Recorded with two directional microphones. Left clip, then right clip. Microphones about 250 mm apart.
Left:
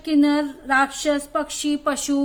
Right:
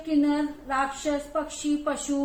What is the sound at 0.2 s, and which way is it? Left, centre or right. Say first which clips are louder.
A woman's voice: left 6 dB; left.